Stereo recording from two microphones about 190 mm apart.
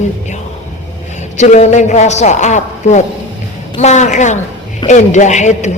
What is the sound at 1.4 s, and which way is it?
A woman's voice, 40° left (ahead or behind).